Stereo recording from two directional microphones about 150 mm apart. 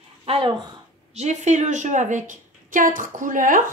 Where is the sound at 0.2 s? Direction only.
35° right (ahead or behind).